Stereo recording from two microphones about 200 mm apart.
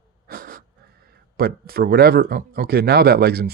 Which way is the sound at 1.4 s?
50° right (ahead or behind).